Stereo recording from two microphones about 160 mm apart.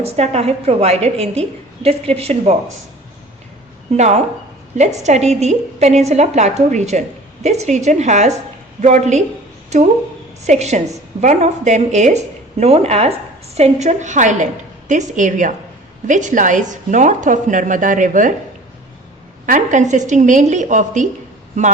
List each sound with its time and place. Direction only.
0.0 s a woman's voice: 40° right (ahead or behind)
3.9 s a woman's voice: 45° right (ahead or behind)
10.4 s a woman's voice: 45° right (ahead or behind)
19.5 s a woman's voice: 50° right (ahead or behind)